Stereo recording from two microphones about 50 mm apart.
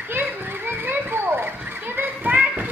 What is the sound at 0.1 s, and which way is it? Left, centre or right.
Children playing, right.